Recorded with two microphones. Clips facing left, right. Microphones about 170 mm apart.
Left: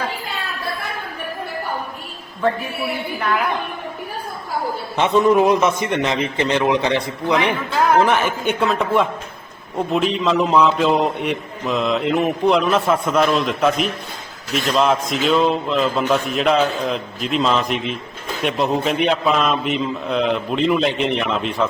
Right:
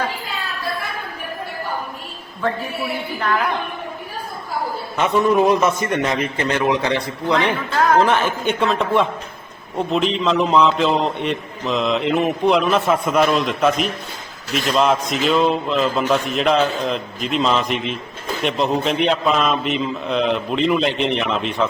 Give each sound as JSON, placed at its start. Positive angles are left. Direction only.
{"t": 4.9, "sound": "a man's voice", "side_deg": 25}